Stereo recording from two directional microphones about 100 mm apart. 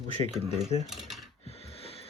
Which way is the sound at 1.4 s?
85° left.